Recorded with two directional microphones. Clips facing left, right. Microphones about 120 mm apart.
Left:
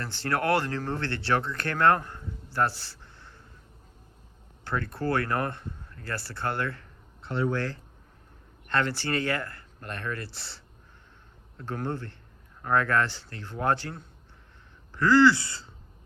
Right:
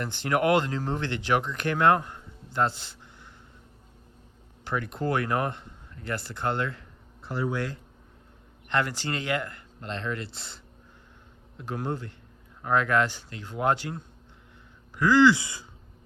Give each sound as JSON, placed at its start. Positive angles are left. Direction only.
{"t": 0.0, "sound": "speech", "side_deg": -15}
{"t": 4.6, "sound": "speech", "side_deg": -15}
{"t": 7.2, "sound": "speech", "side_deg": -5}
{"t": 8.7, "sound": "speech", "side_deg": -15}